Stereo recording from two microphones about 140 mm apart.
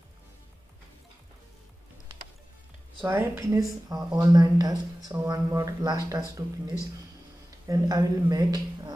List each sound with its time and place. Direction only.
3.0 s speech: 15° right (ahead or behind)
7.6 s speech: 25° right (ahead or behind)